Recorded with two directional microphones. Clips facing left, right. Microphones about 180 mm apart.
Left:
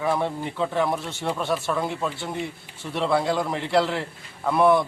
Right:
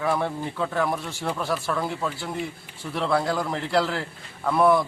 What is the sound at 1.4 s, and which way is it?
Speech, centre (ahead or behind).